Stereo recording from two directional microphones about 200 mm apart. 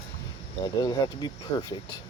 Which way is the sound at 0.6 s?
20° left (ahead or behind).